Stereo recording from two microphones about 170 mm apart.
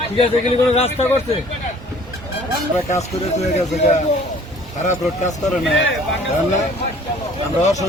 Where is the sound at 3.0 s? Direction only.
40° left (ahead or behind).